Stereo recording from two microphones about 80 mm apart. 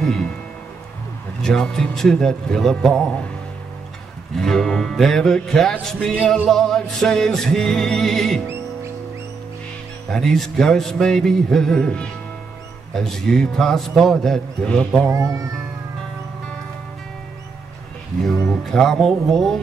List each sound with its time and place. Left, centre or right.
0.0 s speech: centre
1.4 s a man's voice: centre
4.4 s a man's voice: centre
6.2 s music: centre
10.0 s music: centre
15.0 s speech: right
18.2 s music: centre